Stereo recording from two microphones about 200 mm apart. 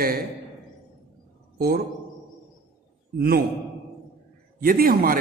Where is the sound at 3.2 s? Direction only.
50° right (ahead or behind).